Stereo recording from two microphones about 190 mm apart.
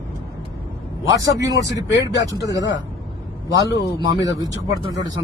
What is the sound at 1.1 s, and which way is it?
Speech, 20° right (ahead or behind).